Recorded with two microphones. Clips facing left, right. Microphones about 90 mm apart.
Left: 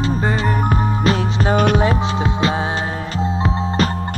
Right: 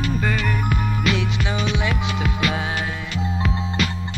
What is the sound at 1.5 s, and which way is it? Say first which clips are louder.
Music: left 11 dB; 50° left (ahead or behind).